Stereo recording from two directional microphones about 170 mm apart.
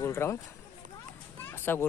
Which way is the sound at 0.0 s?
15° left (ahead or behind).